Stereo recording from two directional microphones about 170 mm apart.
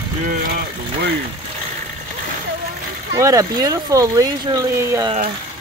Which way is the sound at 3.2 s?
20° right (ahead or behind).